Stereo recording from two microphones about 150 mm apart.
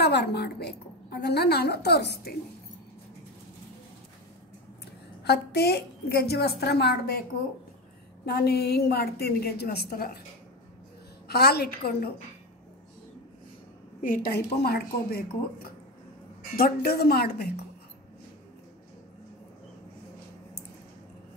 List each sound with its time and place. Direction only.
0.0 s a woman's voice: 90° left
5.2 s a woman's voice: 90° left
8.3 s a woman's voice: 90° left
11.2 s a woman's voice: 90° left
14.0 s a woman's voice: 80° left